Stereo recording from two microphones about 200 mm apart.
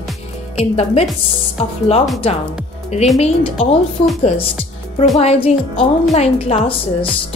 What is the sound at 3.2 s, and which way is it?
Speech, 30° left (ahead or behind).